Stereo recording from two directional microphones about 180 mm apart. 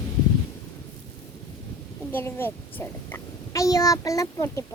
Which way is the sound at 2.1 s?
10° left (ahead or behind).